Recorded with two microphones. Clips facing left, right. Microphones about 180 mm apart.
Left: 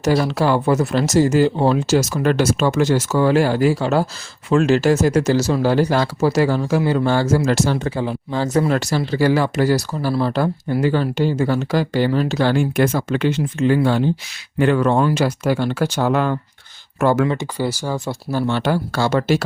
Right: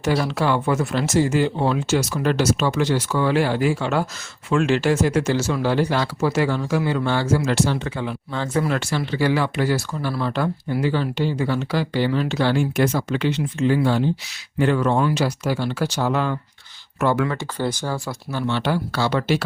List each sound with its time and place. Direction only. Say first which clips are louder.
0.0 s speech: left 4 dB; 40° left (ahead or behind); by 16.4 s 55° left (ahead or behind)
17.0 s speech: left 4 dB; 45° left (ahead or behind)
17.2 s speech: left 3 dB; 15° left (ahead or behind)
18.3 s speech: left 3 dB; 45° left (ahead or behind)